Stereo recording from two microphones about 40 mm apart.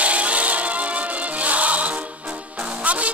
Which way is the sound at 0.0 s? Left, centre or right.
Right.